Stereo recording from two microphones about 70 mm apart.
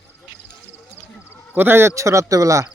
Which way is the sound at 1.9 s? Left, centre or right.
Right.